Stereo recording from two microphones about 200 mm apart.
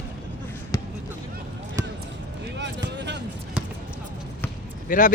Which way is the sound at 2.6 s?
60° right (ahead or behind).